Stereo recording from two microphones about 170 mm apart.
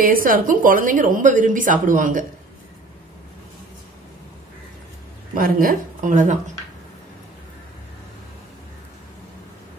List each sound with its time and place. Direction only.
0.0 s a woman's voice: 55° right (ahead or behind)
5.3 s a woman's voice: 55° right (ahead or behind)